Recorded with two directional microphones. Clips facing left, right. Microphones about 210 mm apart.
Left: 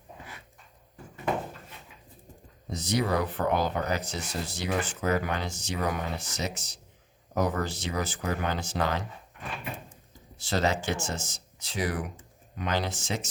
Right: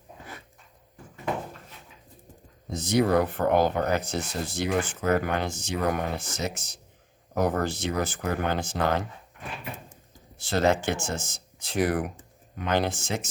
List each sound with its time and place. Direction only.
2.7 s speech: 50° right (ahead or behind)
10.3 s speech: 50° right (ahead or behind)